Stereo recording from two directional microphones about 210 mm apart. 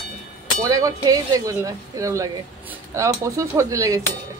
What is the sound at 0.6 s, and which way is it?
Speech, 15° right (ahead or behind).